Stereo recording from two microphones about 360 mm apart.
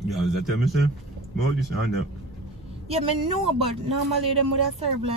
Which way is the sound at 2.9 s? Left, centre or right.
Centre.